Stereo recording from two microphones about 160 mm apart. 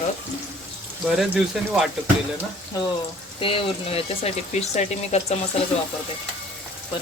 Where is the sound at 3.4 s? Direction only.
35° left (ahead or behind).